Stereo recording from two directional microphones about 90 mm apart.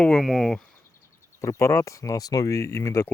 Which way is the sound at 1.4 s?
35° left (ahead or behind).